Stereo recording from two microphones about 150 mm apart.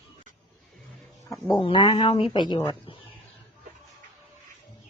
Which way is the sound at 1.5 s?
30° left (ahead or behind).